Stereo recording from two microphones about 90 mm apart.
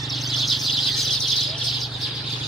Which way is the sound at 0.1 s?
Centre (ahead or behind).